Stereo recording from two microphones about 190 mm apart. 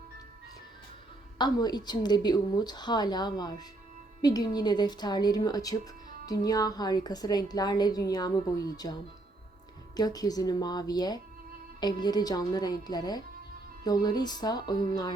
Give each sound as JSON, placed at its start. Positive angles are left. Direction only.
{"t": 1.4, "sound": "a woman's voice", "side_deg": 20}